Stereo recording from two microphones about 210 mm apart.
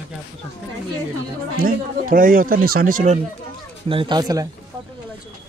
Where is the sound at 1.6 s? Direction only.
40° right (ahead or behind).